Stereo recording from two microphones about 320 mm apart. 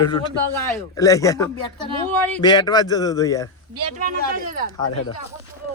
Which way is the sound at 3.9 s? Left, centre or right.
Right.